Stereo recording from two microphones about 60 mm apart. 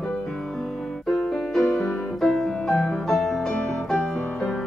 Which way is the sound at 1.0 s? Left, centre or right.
Centre.